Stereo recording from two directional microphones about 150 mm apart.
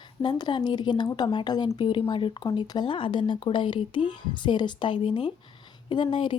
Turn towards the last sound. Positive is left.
turn(degrees=35)  # may be behind; listen again after turning